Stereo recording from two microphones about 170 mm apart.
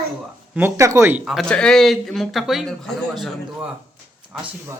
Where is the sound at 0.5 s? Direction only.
15° right (ahead or behind).